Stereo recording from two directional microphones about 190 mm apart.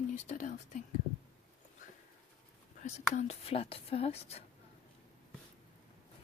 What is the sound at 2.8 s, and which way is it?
Speech, 35° left (ahead or behind).